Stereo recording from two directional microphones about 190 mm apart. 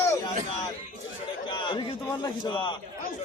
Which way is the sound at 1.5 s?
25° left (ahead or behind).